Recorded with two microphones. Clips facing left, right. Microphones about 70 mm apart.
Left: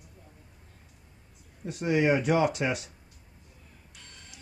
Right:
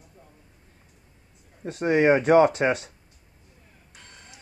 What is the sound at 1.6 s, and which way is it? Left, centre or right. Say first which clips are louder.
Speech: right 5 dB; right.